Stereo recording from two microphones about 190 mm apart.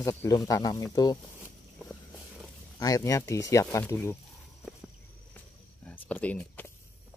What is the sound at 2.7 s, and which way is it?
Speech, 15° left (ahead or behind).